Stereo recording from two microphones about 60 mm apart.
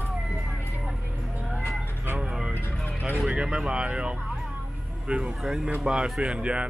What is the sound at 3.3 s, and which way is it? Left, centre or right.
Speech, centre.